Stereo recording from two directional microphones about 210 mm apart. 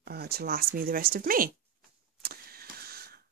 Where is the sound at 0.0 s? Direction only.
50° right (ahead or behind).